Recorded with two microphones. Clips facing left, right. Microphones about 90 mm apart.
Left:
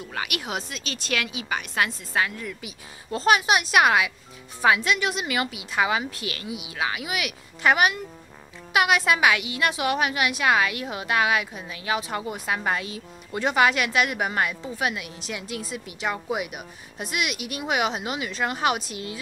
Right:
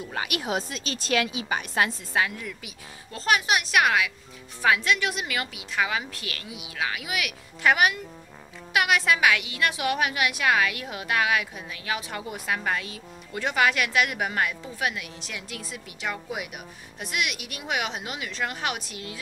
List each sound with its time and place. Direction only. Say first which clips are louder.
0.3 s a woman's voice: right 2 dB; 35° right (ahead or behind)
2.1 s a woman's voice: left 1 dB; 5° right (ahead or behind)
3.2 s a woman's voice: left 4 dB; 15° left (ahead or behind)